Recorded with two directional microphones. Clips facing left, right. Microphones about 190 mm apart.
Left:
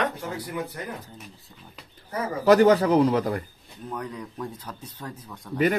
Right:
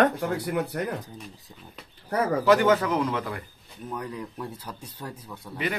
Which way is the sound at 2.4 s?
40° left (ahead or behind).